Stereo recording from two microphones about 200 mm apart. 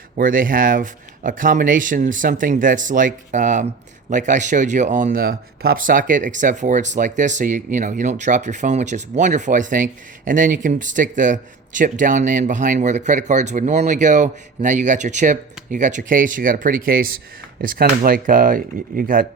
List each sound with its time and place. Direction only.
0.2 s speech: 45° right (ahead or behind)